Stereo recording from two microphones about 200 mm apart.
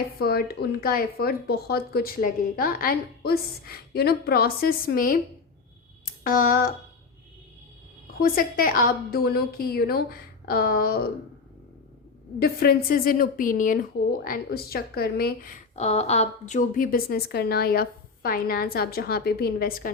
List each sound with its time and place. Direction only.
0.2 s speech: 50° left (ahead or behind)
6.2 s speech: 45° left (ahead or behind)
8.2 s speech: 45° left (ahead or behind)
12.4 s speech: 50° left (ahead or behind)
15.7 s speech: 35° left (ahead or behind)